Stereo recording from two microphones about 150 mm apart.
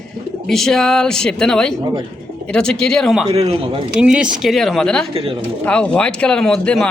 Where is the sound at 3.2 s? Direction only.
40° right (ahead or behind).